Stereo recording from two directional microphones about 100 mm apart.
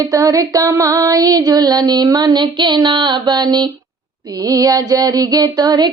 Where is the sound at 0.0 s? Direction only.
35° right (ahead or behind).